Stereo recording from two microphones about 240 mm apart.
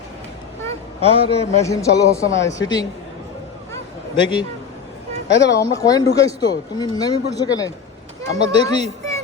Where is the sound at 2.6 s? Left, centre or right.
Left.